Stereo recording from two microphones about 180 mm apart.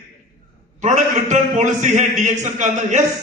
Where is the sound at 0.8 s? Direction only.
40° right (ahead or behind).